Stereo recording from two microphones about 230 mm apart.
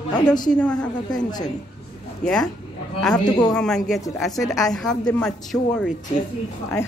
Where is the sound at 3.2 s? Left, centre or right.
Centre.